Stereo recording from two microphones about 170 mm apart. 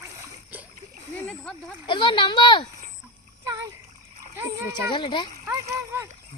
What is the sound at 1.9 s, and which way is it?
Speech, 30° left (ahead or behind).